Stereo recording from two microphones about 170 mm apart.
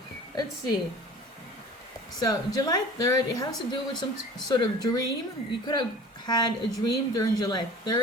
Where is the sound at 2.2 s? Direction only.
25° left (ahead or behind).